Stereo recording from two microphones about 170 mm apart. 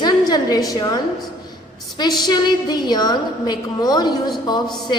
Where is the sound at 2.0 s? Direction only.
25° left (ahead or behind).